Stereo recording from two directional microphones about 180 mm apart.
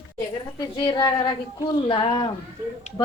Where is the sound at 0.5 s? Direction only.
25° left (ahead or behind).